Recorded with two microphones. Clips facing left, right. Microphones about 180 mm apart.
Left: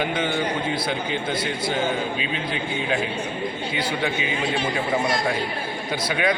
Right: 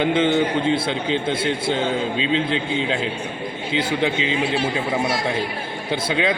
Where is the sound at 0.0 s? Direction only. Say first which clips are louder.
Right 6 dB; 25° right (ahead or behind).